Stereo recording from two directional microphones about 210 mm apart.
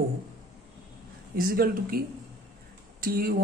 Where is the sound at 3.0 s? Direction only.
45° right (ahead or behind).